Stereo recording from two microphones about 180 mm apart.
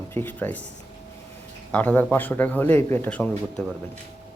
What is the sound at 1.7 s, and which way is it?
Speech, 10° left (ahead or behind).